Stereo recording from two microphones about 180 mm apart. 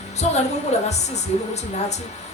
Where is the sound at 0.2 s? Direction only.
35° left (ahead or behind).